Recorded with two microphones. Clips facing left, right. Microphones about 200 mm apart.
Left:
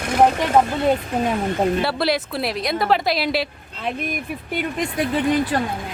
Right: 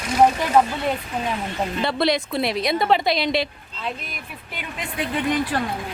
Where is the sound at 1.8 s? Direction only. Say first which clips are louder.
Even; 5° left (ahead or behind).